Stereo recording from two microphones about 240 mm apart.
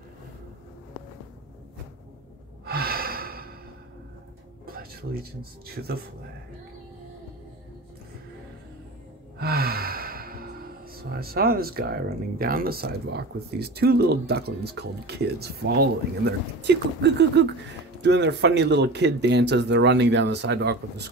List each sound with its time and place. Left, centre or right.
2.6 s gasp: right
4.6 s speech: right
9.4 s speech: right